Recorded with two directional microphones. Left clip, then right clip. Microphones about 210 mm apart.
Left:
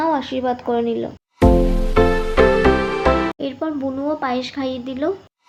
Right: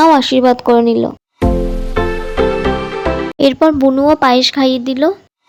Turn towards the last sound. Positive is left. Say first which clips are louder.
# right 10 dB
turn(degrees=-45)  # may be behind; listen again after turning